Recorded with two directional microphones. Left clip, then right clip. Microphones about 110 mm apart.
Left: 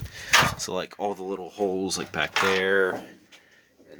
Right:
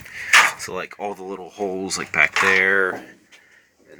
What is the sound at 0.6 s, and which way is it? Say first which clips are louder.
Speech: right 1 dB; 40° left (ahead or behind).